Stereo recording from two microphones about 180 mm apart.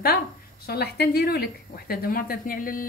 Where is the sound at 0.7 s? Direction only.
65° left (ahead or behind).